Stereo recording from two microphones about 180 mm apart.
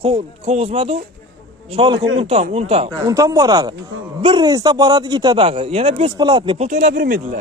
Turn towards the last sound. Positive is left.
turn(degrees=-50)  # may be behind; listen again after turning